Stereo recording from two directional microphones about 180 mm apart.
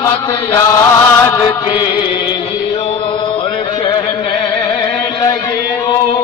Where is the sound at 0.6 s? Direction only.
15° left (ahead or behind).